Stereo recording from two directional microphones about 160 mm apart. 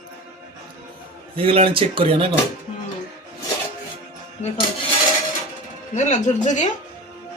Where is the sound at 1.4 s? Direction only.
35° right (ahead or behind).